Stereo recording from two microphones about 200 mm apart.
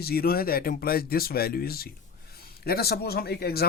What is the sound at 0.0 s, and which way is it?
Speech, 50° left (ahead or behind).